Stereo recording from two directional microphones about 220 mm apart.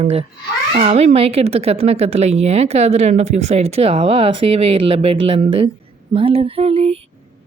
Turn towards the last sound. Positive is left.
turn(degrees=-25)  # may be behind; listen again after turning